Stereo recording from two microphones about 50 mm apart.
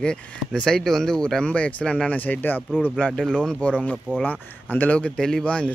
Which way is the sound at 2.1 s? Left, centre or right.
Left.